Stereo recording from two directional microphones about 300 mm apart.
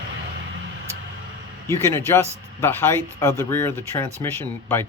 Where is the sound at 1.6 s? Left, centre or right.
Centre.